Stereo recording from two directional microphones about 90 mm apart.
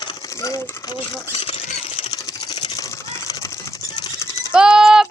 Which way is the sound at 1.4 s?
85° left.